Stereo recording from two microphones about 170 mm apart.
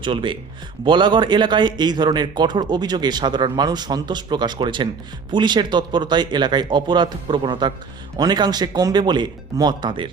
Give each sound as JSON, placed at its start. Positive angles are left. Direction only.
{"t": 0.0, "sound": "speech", "side_deg": -30}